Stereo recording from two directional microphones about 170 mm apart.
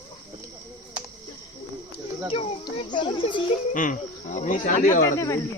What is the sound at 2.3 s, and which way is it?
A child's voice, 35° left (ahead or behind).